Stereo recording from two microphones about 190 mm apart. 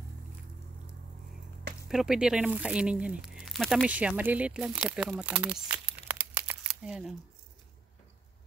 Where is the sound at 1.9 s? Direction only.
5° right (ahead or behind).